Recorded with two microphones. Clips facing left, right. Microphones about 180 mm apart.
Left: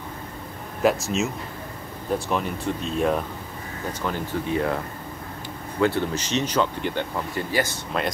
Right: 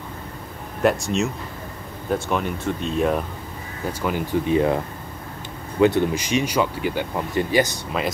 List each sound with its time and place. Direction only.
0.8 s speech: centre (ahead or behind)
4.0 s speech: 15° right (ahead or behind)
5.8 s speech: 15° right (ahead or behind)
8.0 s speech: centre (ahead or behind)